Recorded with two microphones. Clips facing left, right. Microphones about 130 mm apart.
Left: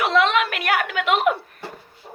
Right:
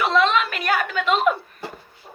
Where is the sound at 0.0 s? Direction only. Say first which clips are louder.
Even; 65° left (ahead or behind).